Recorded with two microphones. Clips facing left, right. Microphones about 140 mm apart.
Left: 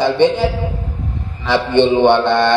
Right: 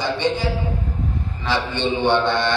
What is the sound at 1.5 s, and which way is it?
A man's voice, 60° left (ahead or behind).